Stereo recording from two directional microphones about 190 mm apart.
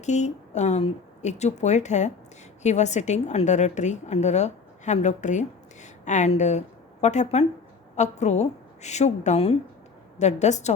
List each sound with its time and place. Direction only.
0.0 s a woman's voice: 40° left (ahead or behind)